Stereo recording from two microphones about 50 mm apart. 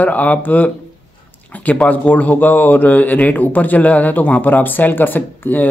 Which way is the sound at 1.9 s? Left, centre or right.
Left.